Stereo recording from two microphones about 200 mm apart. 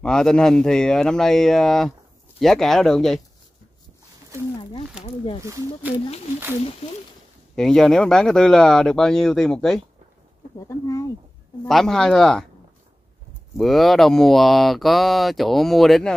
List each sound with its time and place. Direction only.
0.0 s speech: 5° left (ahead or behind)
5.0 s speech: 30° left (ahead or behind)
5.4 s speech: 15° right (ahead or behind)
6.8 s speech: 30° left (ahead or behind)
7.5 s speech: centre (ahead or behind)
10.7 s speech: 15° left (ahead or behind)
11.6 s speech: 5° left (ahead or behind)
13.6 s speech: centre (ahead or behind)